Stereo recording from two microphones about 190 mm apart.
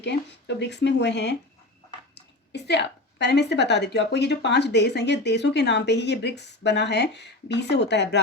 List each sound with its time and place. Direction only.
0.0 s a woman's voice: 65° left (ahead or behind)
2.5 s a woman's voice: 65° left (ahead or behind)